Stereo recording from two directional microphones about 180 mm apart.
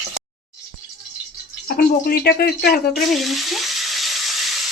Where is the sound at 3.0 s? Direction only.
Centre (ahead or behind).